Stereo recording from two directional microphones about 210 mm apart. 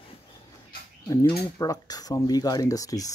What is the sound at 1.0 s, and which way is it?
Speech, 15° left (ahead or behind).